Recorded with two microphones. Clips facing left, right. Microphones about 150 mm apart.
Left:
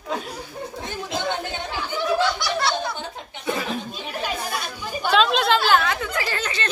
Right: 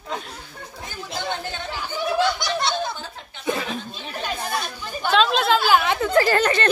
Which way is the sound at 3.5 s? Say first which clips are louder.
Left 4 dB; 5° left (ahead or behind).